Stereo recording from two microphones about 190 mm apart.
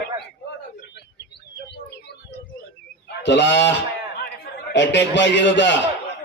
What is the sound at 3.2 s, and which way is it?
Speech, 65° left (ahead or behind).